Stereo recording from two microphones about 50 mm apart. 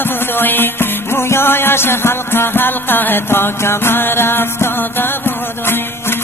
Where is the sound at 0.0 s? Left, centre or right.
Left.